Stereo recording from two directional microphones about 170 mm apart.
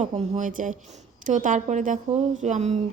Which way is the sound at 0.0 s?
45° right (ahead or behind).